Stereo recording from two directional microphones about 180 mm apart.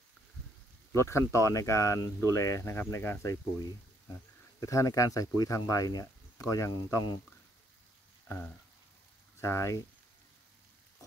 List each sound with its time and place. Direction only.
0.9 s speech: 15° left (ahead or behind)
9.4 s speech: 15° left (ahead or behind)